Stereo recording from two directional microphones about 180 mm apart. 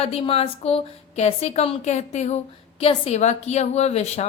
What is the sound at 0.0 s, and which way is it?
A woman's voice, 35° left (ahead or behind).